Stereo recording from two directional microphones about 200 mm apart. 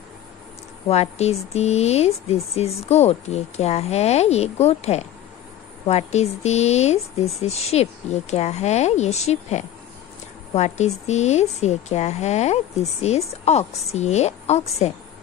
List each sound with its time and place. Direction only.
0.8 s speech: 30° left (ahead or behind)